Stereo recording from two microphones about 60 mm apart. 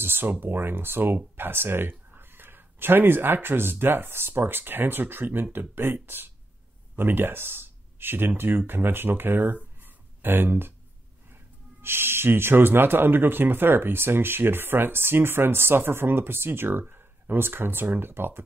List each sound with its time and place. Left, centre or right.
0.0 s speech: right
9.8 s a sound: right
11.8 s speech: right